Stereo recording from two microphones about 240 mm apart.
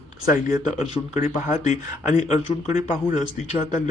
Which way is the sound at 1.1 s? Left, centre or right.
Centre.